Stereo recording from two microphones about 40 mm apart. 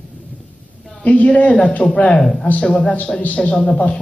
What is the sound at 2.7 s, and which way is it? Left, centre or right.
A man's voice, left.